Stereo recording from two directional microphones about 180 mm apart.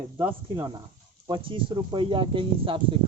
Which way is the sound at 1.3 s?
30° right (ahead or behind).